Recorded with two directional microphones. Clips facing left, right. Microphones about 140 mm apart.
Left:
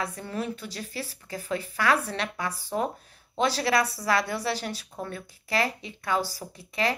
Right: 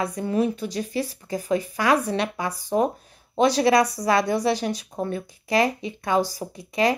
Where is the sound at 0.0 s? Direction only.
15° right (ahead or behind).